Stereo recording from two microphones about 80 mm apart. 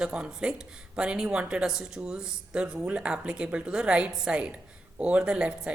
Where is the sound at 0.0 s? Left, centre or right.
Centre.